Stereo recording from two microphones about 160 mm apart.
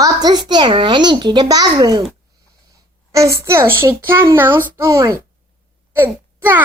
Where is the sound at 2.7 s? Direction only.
20° right (ahead or behind).